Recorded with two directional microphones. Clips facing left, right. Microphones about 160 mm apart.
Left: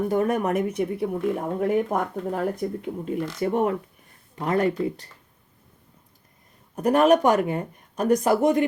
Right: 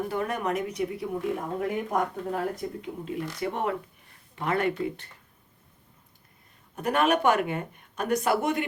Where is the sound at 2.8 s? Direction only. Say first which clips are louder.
Left 5 dB; 50° left (ahead or behind).